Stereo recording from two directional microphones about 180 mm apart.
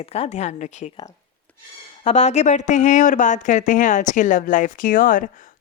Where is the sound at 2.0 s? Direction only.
40° left (ahead or behind).